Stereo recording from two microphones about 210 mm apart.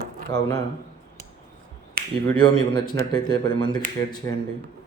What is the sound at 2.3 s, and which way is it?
Speech, 20° left (ahead or behind).